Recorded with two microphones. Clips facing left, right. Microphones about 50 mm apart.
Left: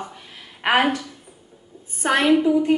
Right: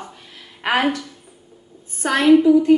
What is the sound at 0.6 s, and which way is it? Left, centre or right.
Speech, left.